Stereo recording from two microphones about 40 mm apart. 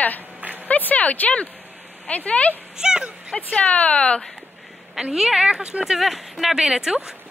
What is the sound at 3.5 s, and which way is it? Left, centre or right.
Speech, left.